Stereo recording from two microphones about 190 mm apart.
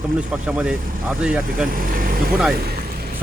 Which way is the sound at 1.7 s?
50° right (ahead or behind).